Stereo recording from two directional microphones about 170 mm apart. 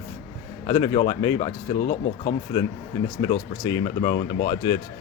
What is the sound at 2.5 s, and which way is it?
Speech, 20° left (ahead or behind).